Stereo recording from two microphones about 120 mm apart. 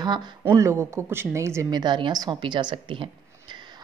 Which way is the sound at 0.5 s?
25° right (ahead or behind).